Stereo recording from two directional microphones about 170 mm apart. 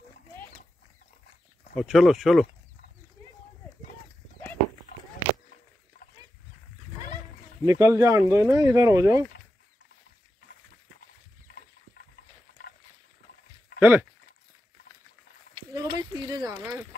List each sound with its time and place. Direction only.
1.8 s speech: centre (ahead or behind)
7.6 s speech: 20° right (ahead or behind)
13.7 s speech: 10° right (ahead or behind)
15.5 s a sound: 20° right (ahead or behind)